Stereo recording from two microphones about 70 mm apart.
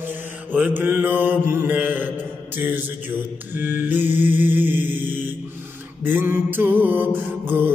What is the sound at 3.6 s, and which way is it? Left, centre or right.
Mantra, right.